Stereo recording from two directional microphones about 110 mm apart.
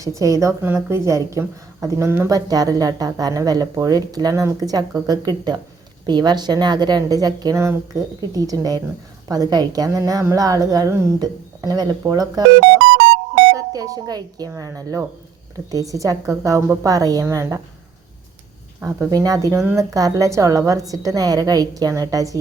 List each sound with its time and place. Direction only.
0.2 s a woman's voice: 30° right (ahead or behind)
2.5 s speech: 35° right (ahead or behind)
13.7 s speech: 35° right (ahead or behind)
18.9 s speech: 35° right (ahead or behind)